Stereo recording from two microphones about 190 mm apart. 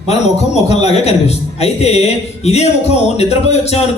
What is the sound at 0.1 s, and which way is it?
A man's voice, 35° left (ahead or behind).